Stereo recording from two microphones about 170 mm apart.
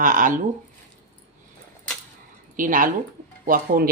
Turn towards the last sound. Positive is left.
turn(degrees=-60)  # may be behind; listen again after turning